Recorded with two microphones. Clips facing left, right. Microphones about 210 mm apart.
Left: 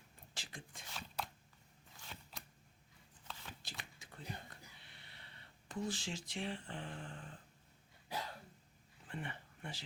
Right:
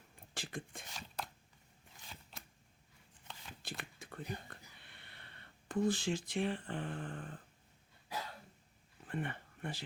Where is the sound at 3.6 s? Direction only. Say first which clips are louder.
Right 7 dB; 55° right (ahead or behind).